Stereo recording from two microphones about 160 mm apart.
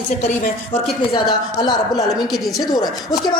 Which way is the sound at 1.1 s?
25° left (ahead or behind).